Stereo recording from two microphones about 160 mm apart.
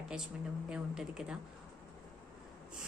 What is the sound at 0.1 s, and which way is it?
A woman's voice, 5° right (ahead or behind).